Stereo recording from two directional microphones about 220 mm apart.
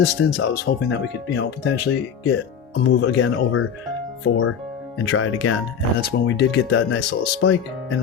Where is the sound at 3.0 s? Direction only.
65° left (ahead or behind).